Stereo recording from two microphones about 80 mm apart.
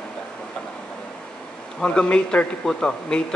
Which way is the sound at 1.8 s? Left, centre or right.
Centre.